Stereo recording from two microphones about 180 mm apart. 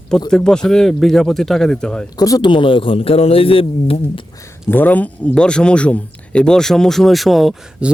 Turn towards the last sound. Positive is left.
turn(degrees=0)  # may be behind; listen again after turning